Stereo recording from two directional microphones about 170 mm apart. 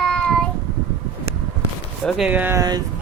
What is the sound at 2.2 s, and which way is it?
Speech, 10° right (ahead or behind).